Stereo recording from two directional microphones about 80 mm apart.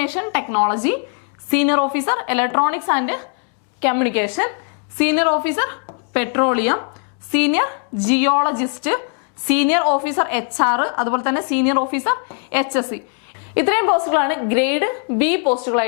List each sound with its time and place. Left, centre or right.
0.0 s a woman's voice: centre